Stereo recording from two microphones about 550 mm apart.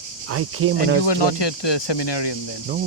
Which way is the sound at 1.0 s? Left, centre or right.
Left.